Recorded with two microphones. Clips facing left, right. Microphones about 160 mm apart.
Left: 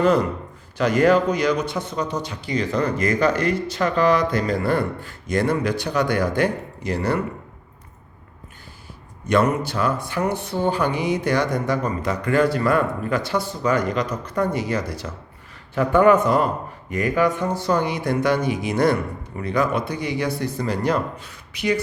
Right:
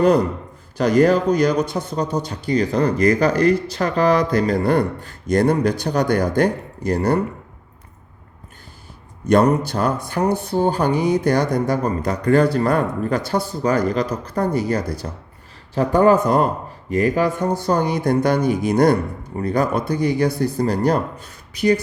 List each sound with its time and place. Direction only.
0.8 s speech: 40° right (ahead or behind)
9.3 s speech: 40° right (ahead or behind)